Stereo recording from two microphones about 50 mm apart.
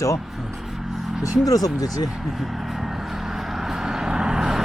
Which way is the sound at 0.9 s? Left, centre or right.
Centre.